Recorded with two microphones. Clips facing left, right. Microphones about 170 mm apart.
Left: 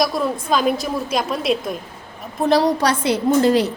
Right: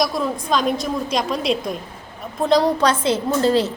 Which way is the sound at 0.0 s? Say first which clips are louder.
Left 1 dB; centre (ahead or behind).